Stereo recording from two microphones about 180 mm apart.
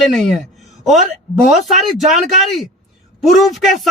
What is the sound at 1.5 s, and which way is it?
A man's voice, centre (ahead or behind).